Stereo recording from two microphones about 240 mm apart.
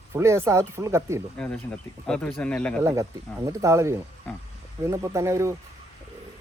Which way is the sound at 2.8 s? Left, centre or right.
Centre.